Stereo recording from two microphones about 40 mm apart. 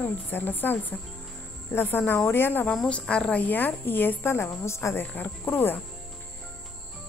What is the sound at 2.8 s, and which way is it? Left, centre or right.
Speech, left.